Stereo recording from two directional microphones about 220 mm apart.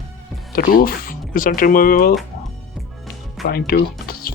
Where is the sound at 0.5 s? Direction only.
40° left (ahead or behind).